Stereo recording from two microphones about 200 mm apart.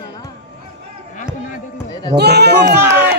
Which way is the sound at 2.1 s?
55° right (ahead or behind).